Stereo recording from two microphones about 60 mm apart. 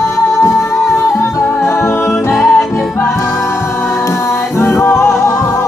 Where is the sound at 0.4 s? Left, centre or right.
Left.